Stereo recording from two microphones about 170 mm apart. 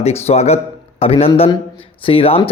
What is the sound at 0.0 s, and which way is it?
A man's voice, 35° left (ahead or behind).